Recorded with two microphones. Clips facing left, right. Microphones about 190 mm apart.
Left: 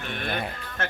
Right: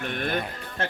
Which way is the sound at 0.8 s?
30° right (ahead or behind).